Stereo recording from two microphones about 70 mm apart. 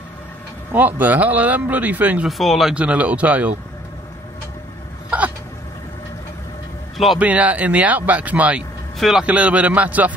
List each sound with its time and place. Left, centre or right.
0.7 s speech: right
2.2 s speech: centre
2.7 s speech: centre
5.1 s hiccup: centre
7.2 s speech: right
8.9 s a man's voice: centre
9.2 s speech: centre